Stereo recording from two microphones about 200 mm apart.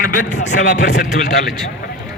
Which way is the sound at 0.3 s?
35° left (ahead or behind).